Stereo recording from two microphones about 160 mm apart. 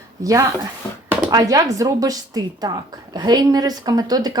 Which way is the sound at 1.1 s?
20° right (ahead or behind).